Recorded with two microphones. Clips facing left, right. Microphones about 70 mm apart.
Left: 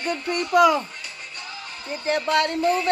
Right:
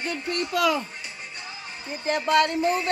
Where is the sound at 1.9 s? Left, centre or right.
Left.